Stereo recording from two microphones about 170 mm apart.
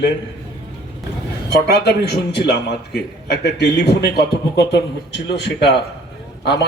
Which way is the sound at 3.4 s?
85° left.